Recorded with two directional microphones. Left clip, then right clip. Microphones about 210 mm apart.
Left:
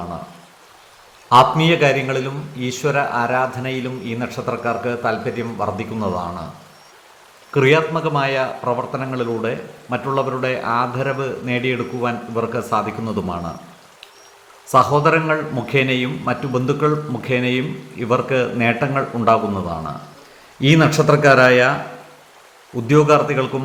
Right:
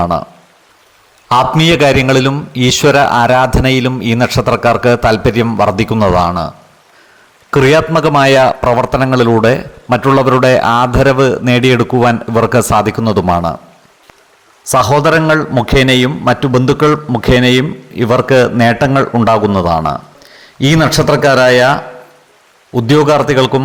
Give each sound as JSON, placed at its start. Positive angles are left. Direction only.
{"t": 1.3, "sound": "a man's voice", "side_deg": -50}
{"t": 7.5, "sound": "a man's voice", "side_deg": -50}
{"t": 14.7, "sound": "a man's voice", "side_deg": -45}